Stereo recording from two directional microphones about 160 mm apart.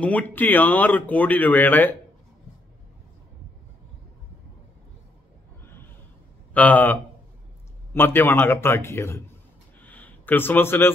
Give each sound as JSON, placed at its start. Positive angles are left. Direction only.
{"t": 0.0, "sound": "speech", "side_deg": 10}
{"t": 5.6, "sound": "snort", "side_deg": 15}
{"t": 6.5, "sound": "speech", "side_deg": 10}
{"t": 9.8, "sound": "a sound", "side_deg": 10}